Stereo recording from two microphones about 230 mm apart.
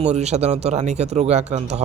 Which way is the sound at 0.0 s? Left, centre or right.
Right.